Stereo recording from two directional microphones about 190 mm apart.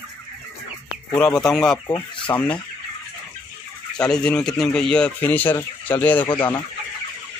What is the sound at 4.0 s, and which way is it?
Speech, 5° left (ahead or behind).